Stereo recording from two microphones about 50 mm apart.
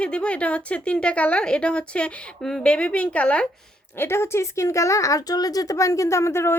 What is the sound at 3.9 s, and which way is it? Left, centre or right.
A woman's voice, left.